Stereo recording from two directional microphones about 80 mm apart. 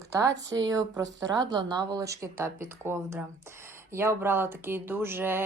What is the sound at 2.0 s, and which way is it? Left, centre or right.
Speech, right.